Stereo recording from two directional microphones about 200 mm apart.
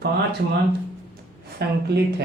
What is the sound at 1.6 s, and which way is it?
Speech, 55° right (ahead or behind).